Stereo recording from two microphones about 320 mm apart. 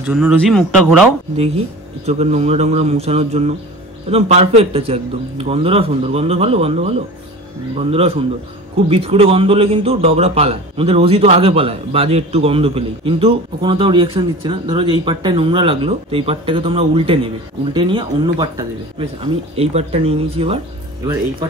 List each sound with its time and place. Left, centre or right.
0.0 s speech: centre
2.0 s a man's voice: centre